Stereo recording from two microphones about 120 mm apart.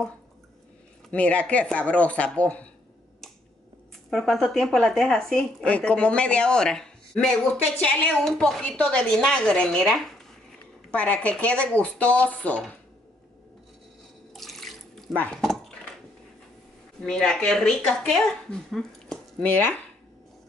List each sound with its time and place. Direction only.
1.1 s speech: 10° left (ahead or behind)
4.1 s speech: centre (ahead or behind)
14.3 s drip: centre (ahead or behind)
15.1 s speech: 10° left (ahead or behind)
17.0 s speech: 5° left (ahead or behind)
19.4 s speech: 15° left (ahead or behind)